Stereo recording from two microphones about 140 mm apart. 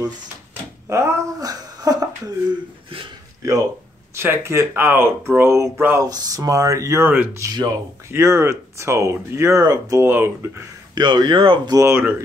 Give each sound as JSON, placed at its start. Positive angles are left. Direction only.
{"t": 0.8, "sound": "a sound", "side_deg": -20}
{"t": 3.4, "sound": "speech", "side_deg": -20}
{"t": 11.0, "sound": "speech", "side_deg": -35}
{"t": 11.8, "sound": "speech", "side_deg": -15}